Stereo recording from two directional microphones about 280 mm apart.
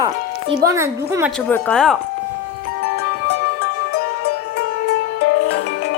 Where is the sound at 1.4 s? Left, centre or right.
Centre.